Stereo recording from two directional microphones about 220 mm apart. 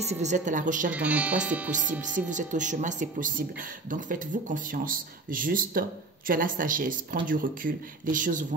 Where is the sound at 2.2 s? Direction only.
35° right (ahead or behind).